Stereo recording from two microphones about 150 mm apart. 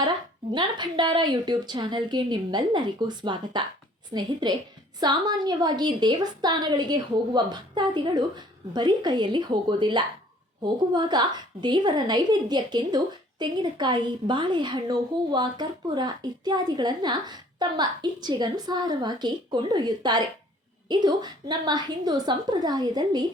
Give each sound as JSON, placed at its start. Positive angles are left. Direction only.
{"t": 0.5, "sound": "a woman's voice", "side_deg": -30}